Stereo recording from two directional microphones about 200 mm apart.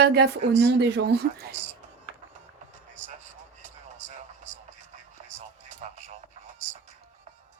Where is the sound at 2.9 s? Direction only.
35° right (ahead or behind).